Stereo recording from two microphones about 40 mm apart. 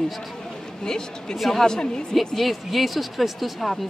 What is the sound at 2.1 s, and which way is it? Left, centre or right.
Speech, centre.